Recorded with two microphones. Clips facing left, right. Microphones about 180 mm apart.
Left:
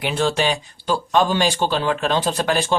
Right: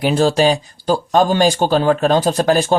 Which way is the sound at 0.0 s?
40° right (ahead or behind).